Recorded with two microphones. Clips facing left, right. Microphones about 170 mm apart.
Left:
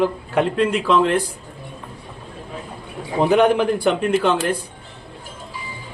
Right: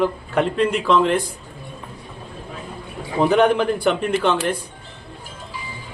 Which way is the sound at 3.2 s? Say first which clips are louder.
Left 1 dB; 10° left (ahead or behind).